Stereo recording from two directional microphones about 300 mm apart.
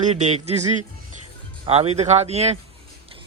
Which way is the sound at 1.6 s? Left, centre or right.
Centre.